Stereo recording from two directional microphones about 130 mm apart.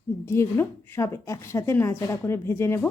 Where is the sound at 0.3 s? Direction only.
20° left (ahead or behind).